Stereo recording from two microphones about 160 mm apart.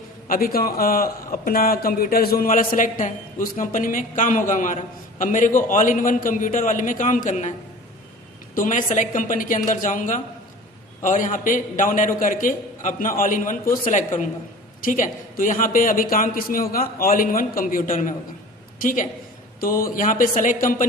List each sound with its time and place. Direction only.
0.3 s a man's voice: 65° left (ahead or behind); by 7.5 s 50° left (ahead or behind)
8.5 s a man's voice: 55° left (ahead or behind)